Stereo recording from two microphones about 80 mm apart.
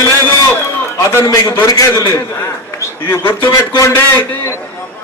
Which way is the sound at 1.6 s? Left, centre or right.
Left.